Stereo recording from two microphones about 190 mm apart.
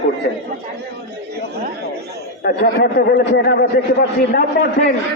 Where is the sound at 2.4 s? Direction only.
55° left (ahead or behind).